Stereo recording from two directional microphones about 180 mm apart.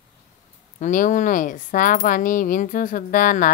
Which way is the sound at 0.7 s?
45° left (ahead or behind).